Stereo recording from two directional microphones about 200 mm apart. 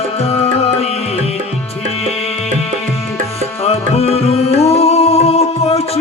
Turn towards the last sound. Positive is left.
turn(degrees=30)  # may be behind; listen again after turning